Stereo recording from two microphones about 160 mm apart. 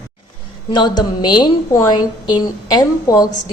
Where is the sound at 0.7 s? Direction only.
30° left (ahead or behind).